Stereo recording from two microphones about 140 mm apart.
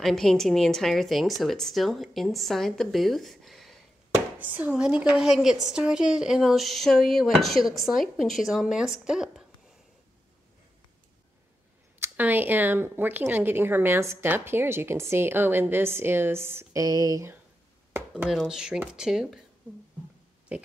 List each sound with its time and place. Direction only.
0.0 s a woman's voice: centre (ahead or behind)
4.4 s a woman's voice: 10° right (ahead or behind)
12.0 s speech: 15° right (ahead or behind)
18.1 s a woman's voice: centre (ahead or behind)
20.5 s speech: 10° right (ahead or behind)